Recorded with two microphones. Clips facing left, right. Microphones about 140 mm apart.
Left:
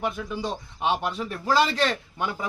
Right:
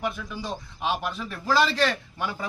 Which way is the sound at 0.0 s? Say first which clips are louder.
Left 3 dB; 25° left (ahead or behind).